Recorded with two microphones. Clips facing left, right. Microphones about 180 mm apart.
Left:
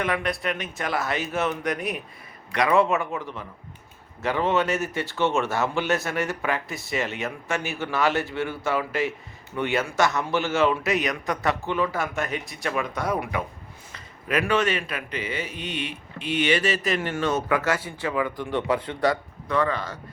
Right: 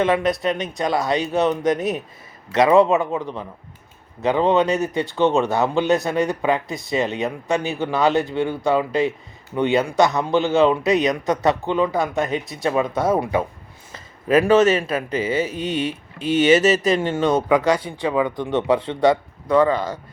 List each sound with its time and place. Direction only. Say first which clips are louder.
0.4 s a man's voice: right 7 dB; 20° right (ahead or behind)
4.2 s a man's voice: right 6 dB; 20° right (ahead or behind); by 16.8 s 40° right (ahead or behind)
17.0 s a man's voice: right 6 dB; 25° right (ahead or behind)